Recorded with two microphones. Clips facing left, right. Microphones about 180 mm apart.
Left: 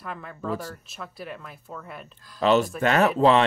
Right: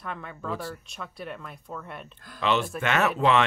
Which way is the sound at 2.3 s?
40° left (ahead or behind).